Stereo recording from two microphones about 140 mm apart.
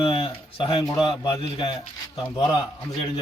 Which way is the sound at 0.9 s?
35° left (ahead or behind).